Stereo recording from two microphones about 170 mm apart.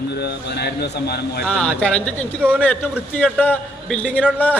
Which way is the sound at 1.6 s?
5° left (ahead or behind).